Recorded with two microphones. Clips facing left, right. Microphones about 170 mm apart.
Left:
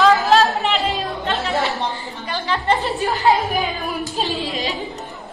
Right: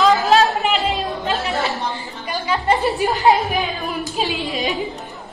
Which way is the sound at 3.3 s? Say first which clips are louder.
Even; centre (ahead or behind).